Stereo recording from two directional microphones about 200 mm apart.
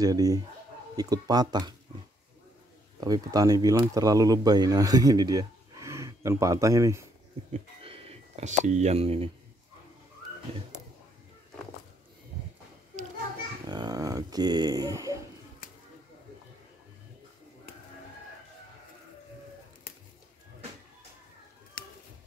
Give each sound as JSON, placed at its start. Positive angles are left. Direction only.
{"t": 0.0, "sound": "speech", "side_deg": -20}
{"t": 3.0, "sound": "speech", "side_deg": -20}
{"t": 7.5, "sound": "speech", "side_deg": -30}
{"t": 13.7, "sound": "speech", "side_deg": -20}